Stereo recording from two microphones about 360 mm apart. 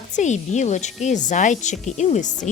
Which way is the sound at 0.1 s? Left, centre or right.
Centre.